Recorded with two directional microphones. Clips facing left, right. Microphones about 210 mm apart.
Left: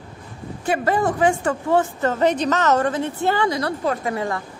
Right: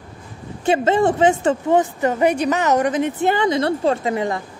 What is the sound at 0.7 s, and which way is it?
A woman's voice, 25° right (ahead or behind).